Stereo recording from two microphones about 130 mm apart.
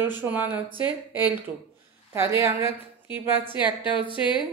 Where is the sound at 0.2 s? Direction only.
15° right (ahead or behind).